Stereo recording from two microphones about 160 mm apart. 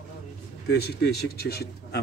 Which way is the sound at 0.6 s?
90° left.